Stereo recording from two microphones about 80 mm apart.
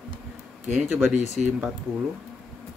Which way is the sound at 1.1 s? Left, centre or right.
Centre.